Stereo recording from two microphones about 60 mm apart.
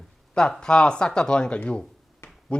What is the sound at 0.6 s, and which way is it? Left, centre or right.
Speech, centre.